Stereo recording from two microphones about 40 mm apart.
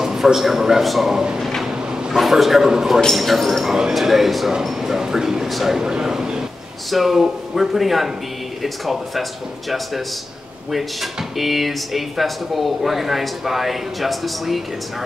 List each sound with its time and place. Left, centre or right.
0.0 s a man's voice: centre
1.1 s speech: centre
1.6 s vehicle: centre
2.1 s a man's voice: centre
3.2 s a man's voice: centre
5.8 s a man's voice: centre
6.9 s speech: centre
10.7 s speech: centre